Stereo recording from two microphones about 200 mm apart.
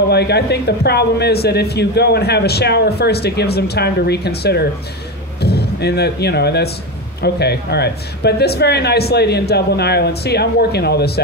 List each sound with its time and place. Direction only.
0.1 s a man's voice: 55° left (ahead or behind)